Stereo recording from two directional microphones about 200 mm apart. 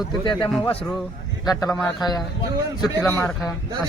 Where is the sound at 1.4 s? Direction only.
10° left (ahead or behind).